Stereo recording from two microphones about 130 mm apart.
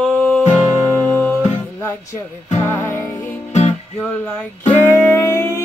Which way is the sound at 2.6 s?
20° left (ahead or behind).